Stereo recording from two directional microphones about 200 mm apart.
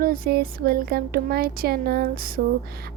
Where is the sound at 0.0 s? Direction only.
50° right (ahead or behind).